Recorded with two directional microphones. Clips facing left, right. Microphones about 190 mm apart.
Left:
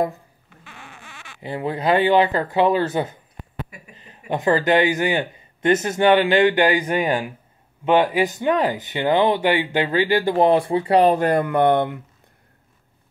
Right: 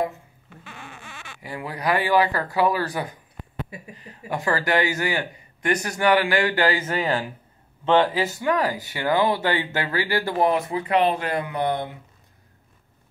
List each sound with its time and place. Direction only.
1.4 s speech: 25° left (ahead or behind)
4.3 s speech: 20° left (ahead or behind); by 12.0 s 60° left (ahead or behind)